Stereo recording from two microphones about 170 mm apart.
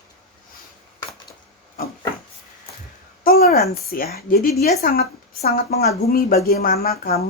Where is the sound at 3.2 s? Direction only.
65° left (ahead or behind).